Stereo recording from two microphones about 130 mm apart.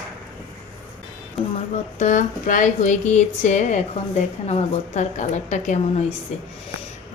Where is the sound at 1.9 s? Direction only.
70° left (ahead or behind).